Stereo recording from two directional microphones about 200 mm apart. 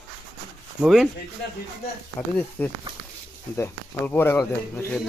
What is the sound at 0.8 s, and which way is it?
Speech, centre (ahead or behind).